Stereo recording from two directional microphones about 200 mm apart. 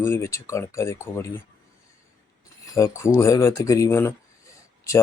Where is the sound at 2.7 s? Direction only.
15° left (ahead or behind).